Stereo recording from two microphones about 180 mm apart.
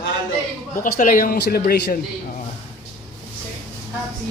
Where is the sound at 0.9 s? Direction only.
50° left (ahead or behind).